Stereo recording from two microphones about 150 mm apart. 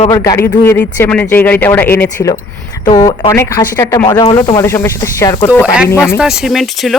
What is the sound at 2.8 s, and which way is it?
Speech, 30° left (ahead or behind).